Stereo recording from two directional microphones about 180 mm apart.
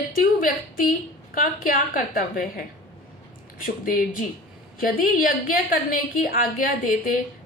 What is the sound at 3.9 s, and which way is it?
A woman's voice, 50° left (ahead or behind).